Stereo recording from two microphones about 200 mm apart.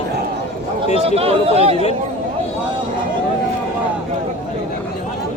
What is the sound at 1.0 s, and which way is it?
Speech, 30° right (ahead or behind).